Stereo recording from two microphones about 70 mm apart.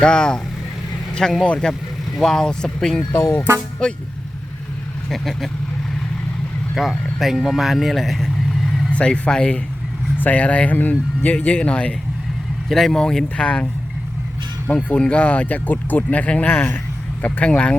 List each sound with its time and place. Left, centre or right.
0.0 s speech: centre
3.1 s speech: left
3.8 s speech: centre
5.0 s speech: centre
6.8 s speech: centre
8.9 s speech: centre
12.6 s speech: centre
14.8 s speech: centre